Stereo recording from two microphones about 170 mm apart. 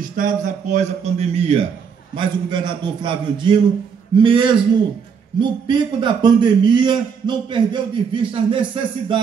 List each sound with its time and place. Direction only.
0.1 s a man's voice: 50° right (ahead or behind); by 9.2 s 30° right (ahead or behind)